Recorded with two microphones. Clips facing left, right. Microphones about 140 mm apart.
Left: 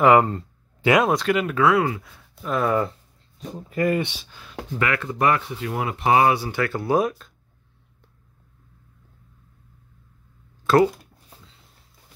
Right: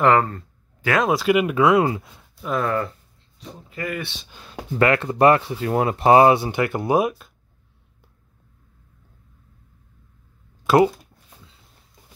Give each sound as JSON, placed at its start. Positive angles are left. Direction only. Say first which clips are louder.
{"t": 0.0, "sound": "speech", "louder": "left 2 dB", "side_deg": 10}
{"t": 1.0, "sound": "speech", "louder": "right 2 dB", "side_deg": -5}
{"t": 2.4, "sound": "speech", "louder": "even", "side_deg": 0}
{"t": 3.3, "sound": "speech", "louder": "left 8 dB", "side_deg": 40}
{"t": 4.7, "sound": "speech", "louder": "right 6 dB", "side_deg": -35}
{"t": 6.3, "sound": "speech", "louder": "right 3 dB", "side_deg": -20}
{"t": 10.7, "sound": "speech", "louder": "right 1 dB", "side_deg": -10}